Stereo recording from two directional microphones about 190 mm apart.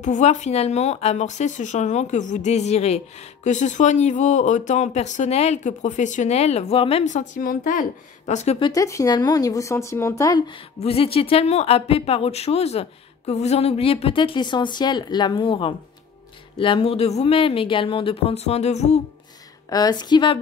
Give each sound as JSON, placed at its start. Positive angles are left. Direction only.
{"t": 0.0, "sound": "a woman's voice", "side_deg": 40}
{"t": 10.8, "sound": "a woman's voice", "side_deg": 30}
{"t": 19.7, "sound": "a woman's voice", "side_deg": 20}